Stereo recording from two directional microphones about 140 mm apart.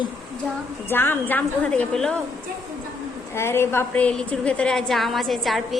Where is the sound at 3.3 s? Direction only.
15° left (ahead or behind).